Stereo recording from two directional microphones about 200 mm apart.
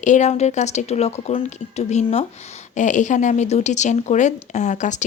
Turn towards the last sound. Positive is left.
turn(degrees=35)  # may be behind; listen again after turning